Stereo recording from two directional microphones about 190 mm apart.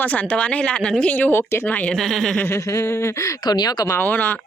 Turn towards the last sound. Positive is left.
turn(degrees=10)  # may be behind; listen again after turning